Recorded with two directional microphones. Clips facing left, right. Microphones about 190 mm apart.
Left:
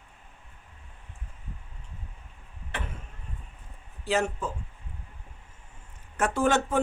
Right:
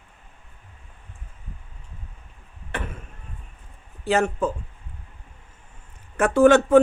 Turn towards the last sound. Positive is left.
turn(degrees=-70)  # may be behind; listen again after turning